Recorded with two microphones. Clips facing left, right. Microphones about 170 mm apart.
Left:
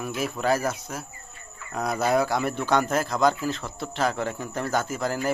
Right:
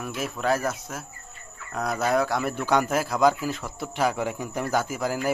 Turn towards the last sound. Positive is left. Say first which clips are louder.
# even
turn(degrees=-10)  # may be behind; listen again after turning